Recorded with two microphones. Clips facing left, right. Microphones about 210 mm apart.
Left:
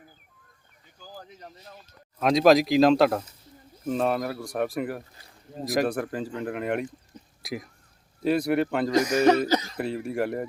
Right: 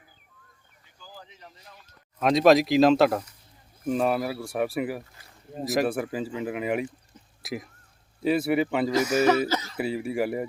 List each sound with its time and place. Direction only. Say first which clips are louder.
0.9 s speech: left 3 dB; 45° left (ahead or behind)
2.2 s speech: even; centre (ahead or behind)
9.5 s speech: left 4 dB; 15° left (ahead or behind)
9.7 s speech: right 1 dB; 5° right (ahead or behind)